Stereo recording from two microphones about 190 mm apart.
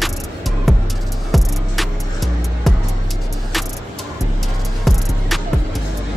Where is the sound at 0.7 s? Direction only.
Centre (ahead or behind).